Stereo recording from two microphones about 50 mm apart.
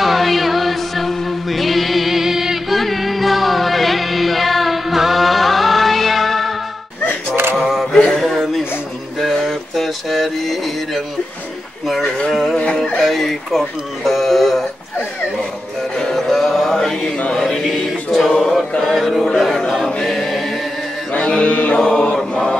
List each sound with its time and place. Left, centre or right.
0.0 s music: centre
7.5 s a sound: centre
8.2 s chuckle: centre
9.2 s a sound: centre
13.0 s speech: centre
16.0 s music: centre
17.3 s chant: centre
18.1 s chant: centre
18.9 s speech: centre
20.0 s choir: centre
21.1 s mantra: left